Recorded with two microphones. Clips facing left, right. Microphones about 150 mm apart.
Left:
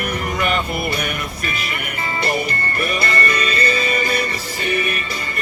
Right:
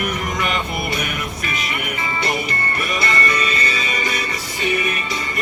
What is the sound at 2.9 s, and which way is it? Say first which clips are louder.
Music: right 2 dB; 40° left (ahead or behind).